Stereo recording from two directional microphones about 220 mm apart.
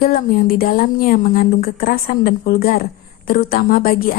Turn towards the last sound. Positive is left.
turn(degrees=40)  # may be behind; listen again after turning